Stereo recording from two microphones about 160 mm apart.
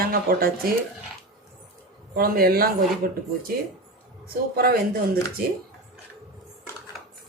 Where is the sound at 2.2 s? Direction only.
65° right (ahead or behind).